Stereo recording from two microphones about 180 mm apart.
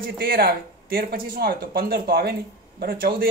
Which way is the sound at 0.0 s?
55° right (ahead or behind).